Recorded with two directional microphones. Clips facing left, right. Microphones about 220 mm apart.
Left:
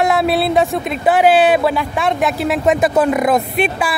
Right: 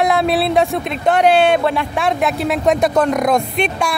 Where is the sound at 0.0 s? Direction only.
Centre (ahead or behind).